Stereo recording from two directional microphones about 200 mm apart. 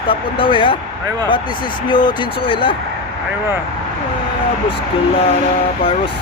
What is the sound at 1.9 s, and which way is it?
Speech, 25° left (ahead or behind).